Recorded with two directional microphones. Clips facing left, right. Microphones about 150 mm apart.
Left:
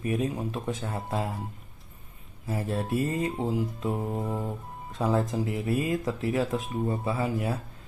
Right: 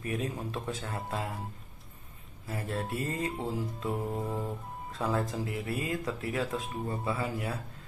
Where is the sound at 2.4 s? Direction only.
20° left (ahead or behind).